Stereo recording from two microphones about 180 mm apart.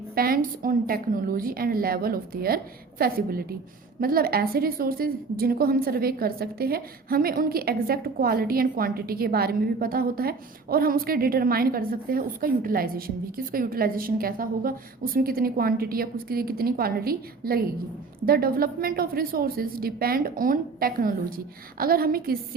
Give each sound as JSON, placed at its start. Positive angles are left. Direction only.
{"t": 0.1, "sound": "a woman's voice", "side_deg": -55}